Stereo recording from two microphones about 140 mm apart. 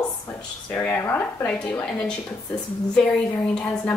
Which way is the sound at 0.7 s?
15° left (ahead or behind).